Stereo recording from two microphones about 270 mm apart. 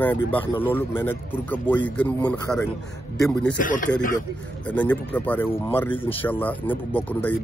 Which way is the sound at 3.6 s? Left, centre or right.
Left.